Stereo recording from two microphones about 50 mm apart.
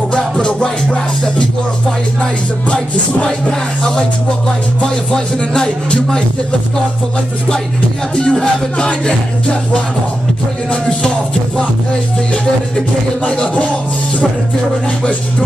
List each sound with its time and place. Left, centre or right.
0.1 s music: left
2.7 s music: centre
5.1 s music: centre
8.2 s music: centre
10.7 s speech: centre
13.2 s speech: left